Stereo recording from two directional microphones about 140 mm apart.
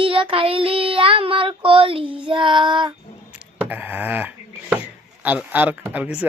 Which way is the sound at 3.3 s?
10° right (ahead or behind).